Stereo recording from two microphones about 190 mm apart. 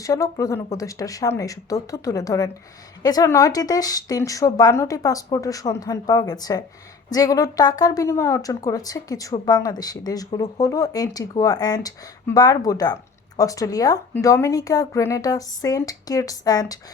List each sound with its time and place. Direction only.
0.0 s a woman's voice: 15° left (ahead or behind)